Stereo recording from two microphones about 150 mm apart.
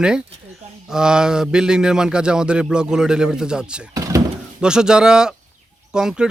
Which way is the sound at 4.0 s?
20° right (ahead or behind).